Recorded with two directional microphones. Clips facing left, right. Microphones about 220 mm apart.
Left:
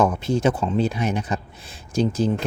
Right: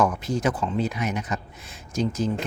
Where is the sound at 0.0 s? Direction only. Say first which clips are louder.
Left 4 dB; 25° left (ahead or behind).